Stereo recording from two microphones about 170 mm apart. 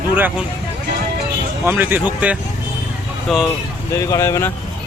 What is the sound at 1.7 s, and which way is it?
Speech, 10° right (ahead or behind).